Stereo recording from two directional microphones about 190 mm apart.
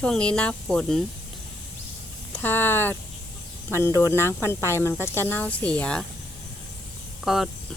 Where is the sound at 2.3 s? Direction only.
10° left (ahead or behind).